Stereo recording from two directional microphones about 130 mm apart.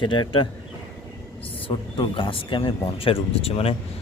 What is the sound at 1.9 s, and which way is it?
A man's voice, 40° left (ahead or behind).